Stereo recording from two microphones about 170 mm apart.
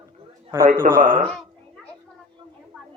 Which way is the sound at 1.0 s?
55° right (ahead or behind).